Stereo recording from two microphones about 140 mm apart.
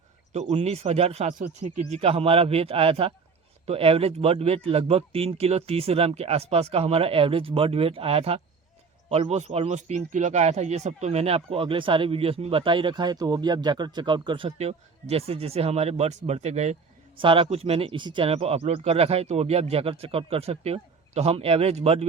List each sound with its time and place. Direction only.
0.3 s speech: 50° right (ahead or behind)
1.4 s speech: 65° right (ahead or behind)
2.0 s speech: 45° right (ahead or behind)
17.2 s speech: 40° right (ahead or behind)